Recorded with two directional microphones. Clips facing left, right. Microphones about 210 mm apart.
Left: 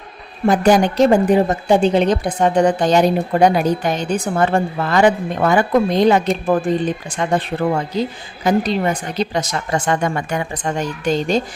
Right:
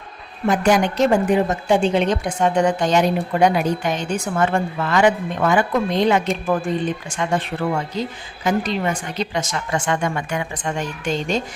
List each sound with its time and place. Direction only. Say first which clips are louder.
0.4 s a woman's voice: left 4 dB; 35° left (ahead or behind)